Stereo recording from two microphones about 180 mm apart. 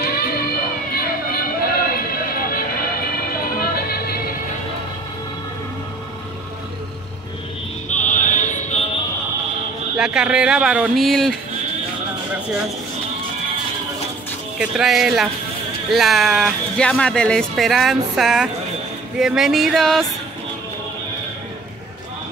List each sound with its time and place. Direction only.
0.0 s music: 60° left (ahead or behind)
7.9 s opera: 45° left (ahead or behind)
9.9 s speech: 5° right (ahead or behind)
14.6 s speech: centre (ahead or behind)